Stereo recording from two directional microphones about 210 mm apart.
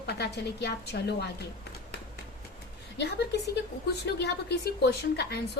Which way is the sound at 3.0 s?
55° left (ahead or behind).